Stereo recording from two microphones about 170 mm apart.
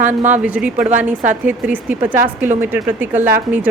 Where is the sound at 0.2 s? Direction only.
45° right (ahead or behind).